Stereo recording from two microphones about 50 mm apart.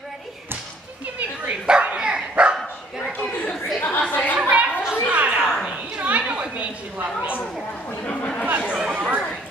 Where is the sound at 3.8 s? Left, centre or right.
Left.